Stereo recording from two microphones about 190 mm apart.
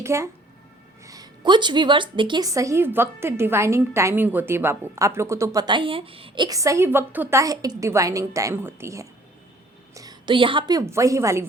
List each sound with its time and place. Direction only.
0.0 s a woman's voice: 15° right (ahead or behind)